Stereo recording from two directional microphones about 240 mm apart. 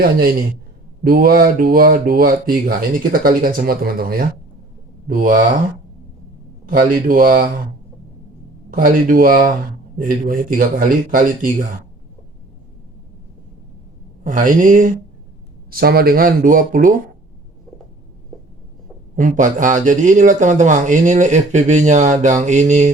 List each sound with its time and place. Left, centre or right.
0.0 s a man's voice: right
6.7 s a man's voice: right
8.7 s a man's voice: right
14.3 s a man's voice: right
19.1 s a man's voice: right